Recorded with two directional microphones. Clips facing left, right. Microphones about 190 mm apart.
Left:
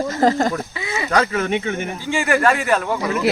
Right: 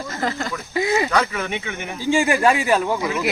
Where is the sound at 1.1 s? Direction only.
45° left (ahead or behind).